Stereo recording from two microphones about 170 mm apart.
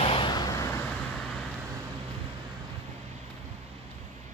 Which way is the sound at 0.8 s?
5° left (ahead or behind).